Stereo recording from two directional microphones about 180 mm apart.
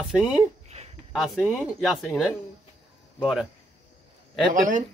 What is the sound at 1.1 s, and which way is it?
Speech, 5° right (ahead or behind).